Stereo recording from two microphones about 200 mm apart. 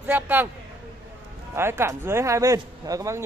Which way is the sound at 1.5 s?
10° right (ahead or behind).